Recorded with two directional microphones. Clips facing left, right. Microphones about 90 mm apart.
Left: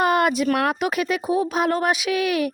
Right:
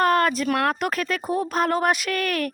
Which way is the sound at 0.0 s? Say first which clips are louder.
Left 1 dB; 10° left (ahead or behind).